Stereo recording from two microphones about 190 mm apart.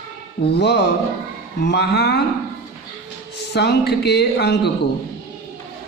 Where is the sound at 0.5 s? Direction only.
60° left (ahead or behind).